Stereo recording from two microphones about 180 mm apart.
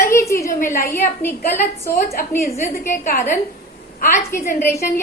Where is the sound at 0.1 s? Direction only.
15° left (ahead or behind).